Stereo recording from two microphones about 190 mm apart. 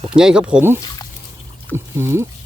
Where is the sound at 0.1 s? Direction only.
5° right (ahead or behind).